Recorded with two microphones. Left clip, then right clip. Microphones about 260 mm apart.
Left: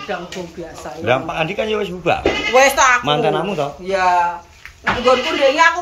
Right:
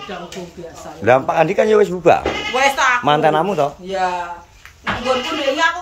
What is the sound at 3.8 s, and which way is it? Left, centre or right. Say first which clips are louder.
Speech: left 3 dB; centre.